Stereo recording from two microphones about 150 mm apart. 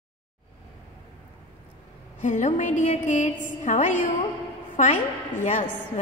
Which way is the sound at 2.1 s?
55° left (ahead or behind).